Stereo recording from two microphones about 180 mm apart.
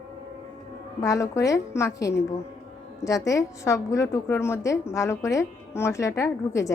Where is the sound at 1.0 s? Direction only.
20° left (ahead or behind).